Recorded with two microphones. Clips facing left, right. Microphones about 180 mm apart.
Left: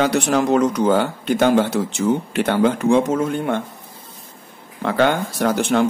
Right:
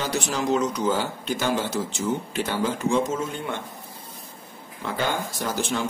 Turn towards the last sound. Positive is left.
turn(degrees=60)  # may be behind; listen again after turning